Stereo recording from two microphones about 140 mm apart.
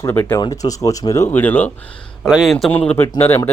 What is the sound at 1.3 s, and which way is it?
Speech, 15° left (ahead or behind).